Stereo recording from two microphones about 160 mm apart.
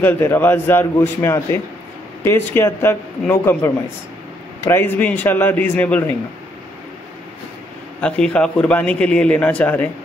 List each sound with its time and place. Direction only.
0.0 s a man's voice: 15° left (ahead or behind)
8.0 s a man's voice: 5° left (ahead or behind)